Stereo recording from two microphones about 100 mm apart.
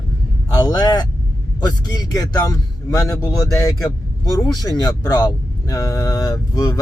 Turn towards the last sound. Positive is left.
turn(degrees=40)  # may be behind; listen again after turning